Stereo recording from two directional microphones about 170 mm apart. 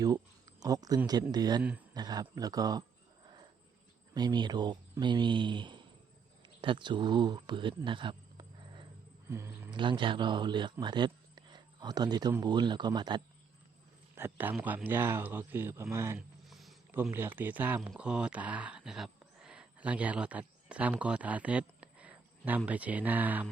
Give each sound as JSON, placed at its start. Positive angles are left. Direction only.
{"t": 0.0, "sound": "speech", "side_deg": -20}
{"t": 4.1, "sound": "speech", "side_deg": -25}
{"t": 7.9, "sound": "cricket", "side_deg": -30}
{"t": 9.3, "sound": "speech", "side_deg": -15}
{"t": 9.7, "sound": "a man's voice", "side_deg": -30}
{"t": 14.2, "sound": "speech", "side_deg": -10}
{"t": 16.1, "sound": "a sound", "side_deg": 0}
{"t": 16.9, "sound": "speech", "side_deg": -10}